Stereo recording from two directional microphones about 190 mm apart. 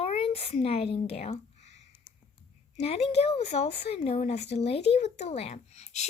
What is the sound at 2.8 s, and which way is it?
Speech, 35° left (ahead or behind).